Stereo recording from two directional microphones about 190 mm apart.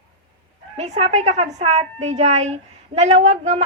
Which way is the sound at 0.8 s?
35° right (ahead or behind).